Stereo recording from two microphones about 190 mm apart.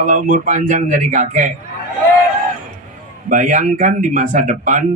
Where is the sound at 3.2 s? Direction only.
45° right (ahead or behind).